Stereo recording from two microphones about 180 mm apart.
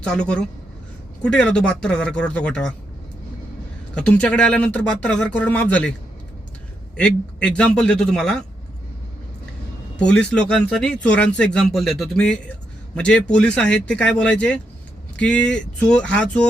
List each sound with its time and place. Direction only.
0.0 s speech: 5° left (ahead or behind)
3.9 s speech: 5° left (ahead or behind)
6.9 s speech: 5° left (ahead or behind)
10.0 s speech: 5° left (ahead or behind)